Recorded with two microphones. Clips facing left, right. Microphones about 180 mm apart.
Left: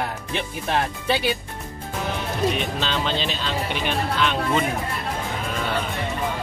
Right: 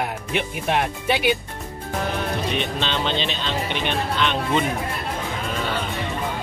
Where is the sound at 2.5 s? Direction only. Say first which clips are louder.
Right 1 dB; 5° left (ahead or behind).